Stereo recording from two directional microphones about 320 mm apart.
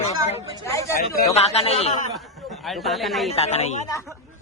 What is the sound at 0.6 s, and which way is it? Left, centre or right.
A man's voice, centre.